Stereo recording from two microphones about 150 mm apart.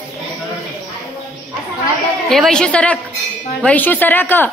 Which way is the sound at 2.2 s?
5° left (ahead or behind).